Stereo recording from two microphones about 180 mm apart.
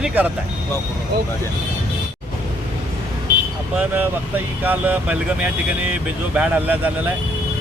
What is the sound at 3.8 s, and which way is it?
Speech, 10° right (ahead or behind).